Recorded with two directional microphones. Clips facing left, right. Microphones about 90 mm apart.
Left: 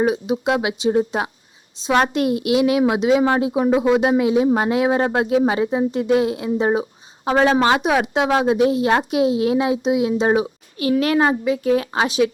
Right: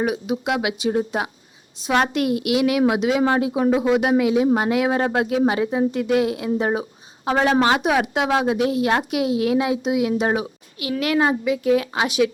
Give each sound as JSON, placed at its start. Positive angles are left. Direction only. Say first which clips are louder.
{"t": 0.0, "sound": "a woman's voice", "louder": "left 4 dB", "side_deg": 30}